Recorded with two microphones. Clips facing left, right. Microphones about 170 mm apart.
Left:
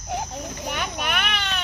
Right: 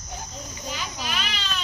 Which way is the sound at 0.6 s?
65° left (ahead or behind).